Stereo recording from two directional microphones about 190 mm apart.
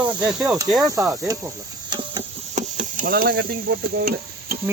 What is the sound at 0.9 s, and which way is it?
Cricket, 10° right (ahead or behind).